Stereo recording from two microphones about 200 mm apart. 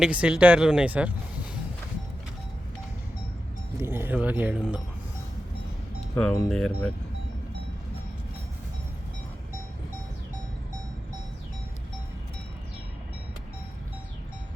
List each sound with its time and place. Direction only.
0.0 s speech: 5° right (ahead or behind)
3.8 s speech: 10° right (ahead or behind)
6.1 s speech: 5° left (ahead or behind)